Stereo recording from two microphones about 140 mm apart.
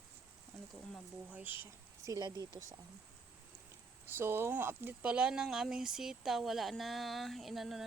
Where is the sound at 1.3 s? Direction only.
15° right (ahead or behind).